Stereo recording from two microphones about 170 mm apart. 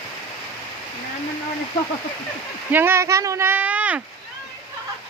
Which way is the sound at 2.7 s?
10° right (ahead or behind).